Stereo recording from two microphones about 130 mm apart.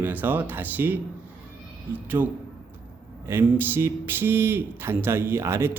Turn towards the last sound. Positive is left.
turn(degrees=-20)  # may be behind; listen again after turning